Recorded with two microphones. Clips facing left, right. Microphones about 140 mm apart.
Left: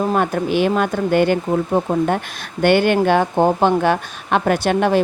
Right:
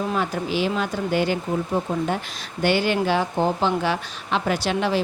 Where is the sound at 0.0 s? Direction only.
50° left (ahead or behind).